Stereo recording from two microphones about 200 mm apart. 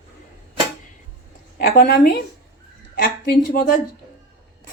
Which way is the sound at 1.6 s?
50° left (ahead or behind).